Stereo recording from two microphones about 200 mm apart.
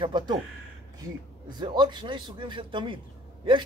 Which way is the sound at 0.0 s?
25° right (ahead or behind).